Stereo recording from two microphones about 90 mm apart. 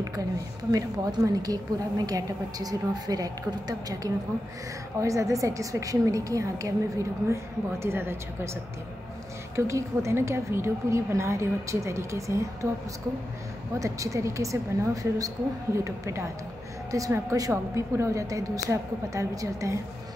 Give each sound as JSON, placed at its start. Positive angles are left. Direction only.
{"t": 0.0, "sound": "a woman's voice", "side_deg": -45}
{"t": 9.6, "sound": "a woman's voice", "side_deg": -35}
{"t": 13.7, "sound": "a woman's voice", "side_deg": -35}